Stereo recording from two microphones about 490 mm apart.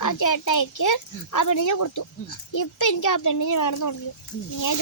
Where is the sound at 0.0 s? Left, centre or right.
Left.